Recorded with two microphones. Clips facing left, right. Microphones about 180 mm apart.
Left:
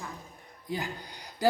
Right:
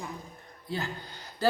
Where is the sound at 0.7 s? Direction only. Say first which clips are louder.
Even; 15° left (ahead or behind).